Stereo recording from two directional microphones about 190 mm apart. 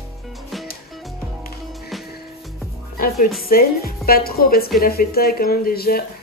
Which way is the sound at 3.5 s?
50° left (ahead or behind).